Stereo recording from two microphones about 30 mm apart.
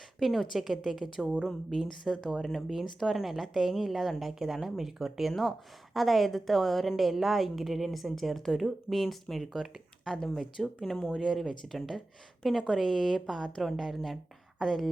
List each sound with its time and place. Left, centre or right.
0.2 s a woman's voice: centre
1.2 s speech: right
2.1 s a woman's voice: centre
4.3 s a woman's voice: centre
8.4 s speech: centre
8.6 s a woman's voice: centre